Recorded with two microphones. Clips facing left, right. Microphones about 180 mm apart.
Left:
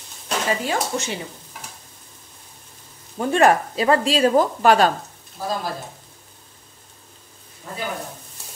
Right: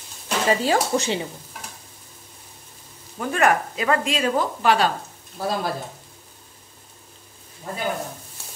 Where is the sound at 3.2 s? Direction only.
30° left (ahead or behind); by 4.9 s 45° left (ahead or behind).